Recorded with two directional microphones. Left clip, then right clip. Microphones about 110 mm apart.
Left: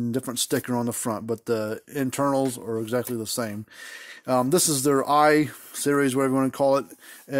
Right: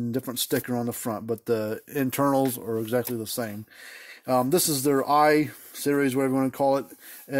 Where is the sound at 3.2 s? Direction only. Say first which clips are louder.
Left 2 dB; 25° left (ahead or behind).